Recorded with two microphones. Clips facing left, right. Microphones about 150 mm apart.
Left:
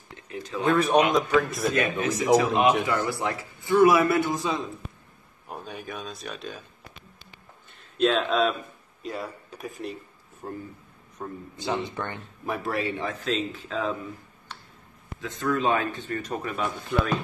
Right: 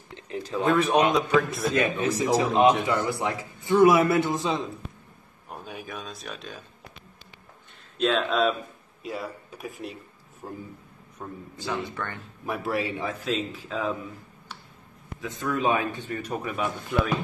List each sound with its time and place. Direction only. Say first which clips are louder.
0.1 s a sound: right 3 dB; 35° right (ahead or behind)
0.7 s a man's voice: left 1 dB; centre (ahead or behind)
1.8 s speech: right 3 dB; 30° right (ahead or behind)
2.9 s a man's voice: right 1 dB; 20° right (ahead or behind)
5.5 s a man's voice: left 1 dB; centre (ahead or behind)
8.0 s a man's voice: left 1 dB; centre (ahead or behind)
11.1 s speech: left 2 dB; 20° left (ahead or behind)
12.4 s a man's voice: even; 5° right (ahead or behind)
15.1 s a man's voice: left 2 dB; 10° right (ahead or behind)